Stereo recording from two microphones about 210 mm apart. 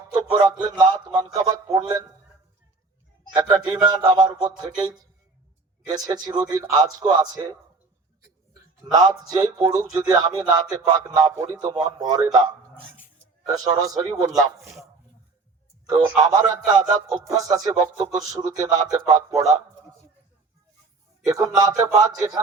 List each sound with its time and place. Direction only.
0.1 s music: 20° right (ahead or behind)
3.3 s a man's voice: 20° right (ahead or behind)
5.9 s a man's voice: 20° right (ahead or behind)
8.9 s music: 20° right (ahead or behind)
13.5 s music: 15° right (ahead or behind)
15.9 s music: 15° right (ahead or behind)
21.2 s music: 15° right (ahead or behind)